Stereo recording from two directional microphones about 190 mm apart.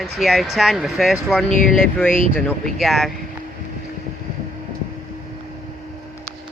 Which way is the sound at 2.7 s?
Centre (ahead or behind).